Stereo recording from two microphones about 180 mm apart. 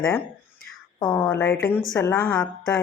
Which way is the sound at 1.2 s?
5° left (ahead or behind).